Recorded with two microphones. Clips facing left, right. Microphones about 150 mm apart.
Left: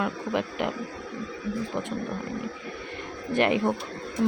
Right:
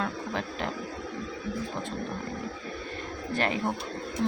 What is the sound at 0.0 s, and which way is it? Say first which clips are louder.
Speech: left 4 dB; 15° left (ahead or behind).